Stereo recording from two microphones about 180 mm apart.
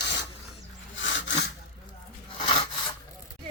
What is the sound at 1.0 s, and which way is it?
Sawing, 90° left.